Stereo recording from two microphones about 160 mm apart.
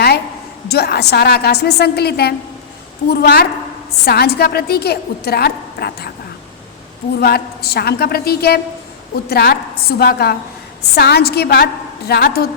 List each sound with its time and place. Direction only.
0.7 s a woman's voice: 90° left
7.2 s a woman's voice: 80° left